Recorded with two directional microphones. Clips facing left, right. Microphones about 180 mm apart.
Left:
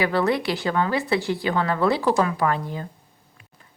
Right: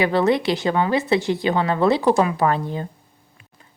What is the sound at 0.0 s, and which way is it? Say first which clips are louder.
Speech: right 3 dB; 20° right (ahead or behind).